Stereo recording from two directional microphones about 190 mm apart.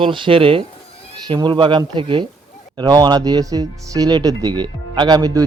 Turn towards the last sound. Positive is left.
turn(degrees=-20)  # may be behind; listen again after turning